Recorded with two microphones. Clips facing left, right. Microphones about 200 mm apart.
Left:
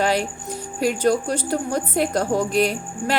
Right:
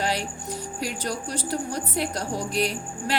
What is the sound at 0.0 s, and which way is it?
Music, 50° left (ahead or behind).